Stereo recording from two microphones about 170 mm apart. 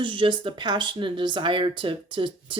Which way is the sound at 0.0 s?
30° right (ahead or behind).